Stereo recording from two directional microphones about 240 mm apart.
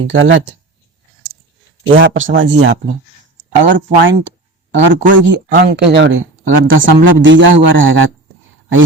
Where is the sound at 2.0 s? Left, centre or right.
Right.